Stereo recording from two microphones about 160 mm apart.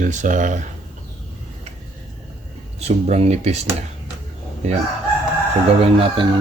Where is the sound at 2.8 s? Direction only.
45° right (ahead or behind).